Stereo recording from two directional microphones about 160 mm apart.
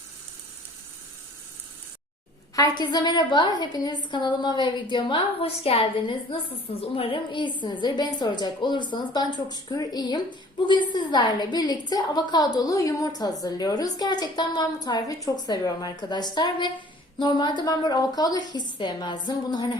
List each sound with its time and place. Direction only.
2.6 s a woman's voice: 25° left (ahead or behind)